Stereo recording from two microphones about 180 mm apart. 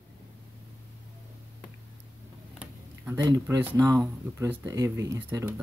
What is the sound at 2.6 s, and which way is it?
Speech, 10° right (ahead or behind).